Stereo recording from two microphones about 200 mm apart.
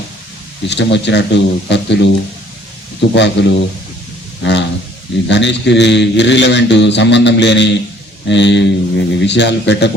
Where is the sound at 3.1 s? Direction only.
60° left (ahead or behind).